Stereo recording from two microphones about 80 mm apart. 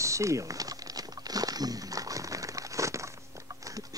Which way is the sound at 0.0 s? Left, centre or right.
Right.